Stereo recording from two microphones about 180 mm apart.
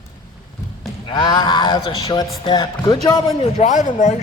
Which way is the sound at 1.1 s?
25° left (ahead or behind).